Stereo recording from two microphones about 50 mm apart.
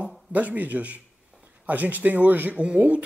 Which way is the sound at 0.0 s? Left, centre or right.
Right.